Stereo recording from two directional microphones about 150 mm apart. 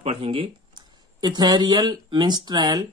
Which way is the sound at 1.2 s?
30° right (ahead or behind).